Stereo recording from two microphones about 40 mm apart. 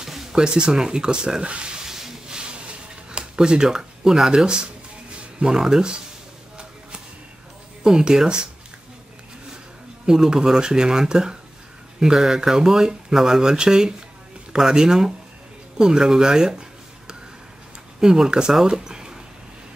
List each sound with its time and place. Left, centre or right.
0.0 s a sound: centre
0.4 s speech: right
1.9 s a sound: centre
3.1 s speech: right
7.8 s speech: centre
10.0 s speech: centre
18.0 s speech: centre